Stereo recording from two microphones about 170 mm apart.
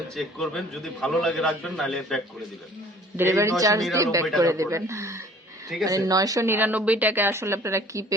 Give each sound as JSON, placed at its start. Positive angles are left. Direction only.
{"t": 0.1, "sound": "a man's voice", "side_deg": 0}
{"t": 3.2, "sound": "speech", "side_deg": -15}